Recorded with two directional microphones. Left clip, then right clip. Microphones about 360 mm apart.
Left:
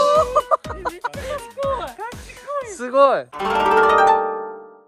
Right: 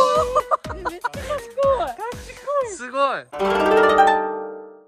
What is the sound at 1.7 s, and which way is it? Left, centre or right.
Music, right.